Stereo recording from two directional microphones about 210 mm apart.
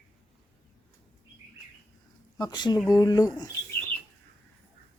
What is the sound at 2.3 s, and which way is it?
Speech, 20° left (ahead or behind).